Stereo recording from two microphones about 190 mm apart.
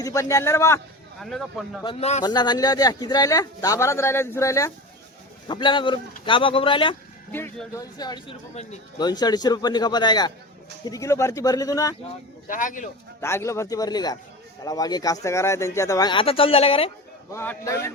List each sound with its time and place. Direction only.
0.0 s speech: 15° left (ahead or behind)
1.2 s speech: centre (ahead or behind)
1.8 s speech: 30° left (ahead or behind)
2.2 s a man's voice: 20° left (ahead or behind)
7.3 s a man's voice: 10° left (ahead or behind)
12.5 s speech: 45° left (ahead or behind)
13.2 s a man's voice: 15° left (ahead or behind); by 16.9 s 30° left (ahead or behind)
17.3 s speech: 10° left (ahead or behind)